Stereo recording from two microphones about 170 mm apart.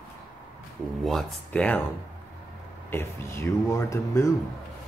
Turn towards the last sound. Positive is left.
turn(degrees=15)  # may be behind; listen again after turning